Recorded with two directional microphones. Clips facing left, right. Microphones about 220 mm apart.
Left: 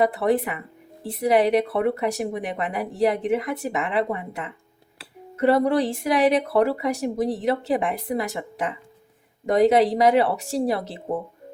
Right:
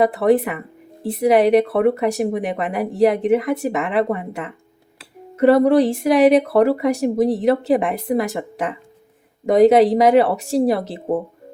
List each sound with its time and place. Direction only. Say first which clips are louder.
0.0 s speech: right 5 dB; 50° right (ahead or behind)